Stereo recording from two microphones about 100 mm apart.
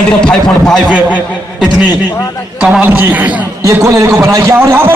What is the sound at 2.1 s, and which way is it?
Speech, 35° left (ahead or behind).